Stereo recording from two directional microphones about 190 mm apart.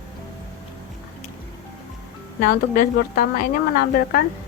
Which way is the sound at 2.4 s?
50° left (ahead or behind).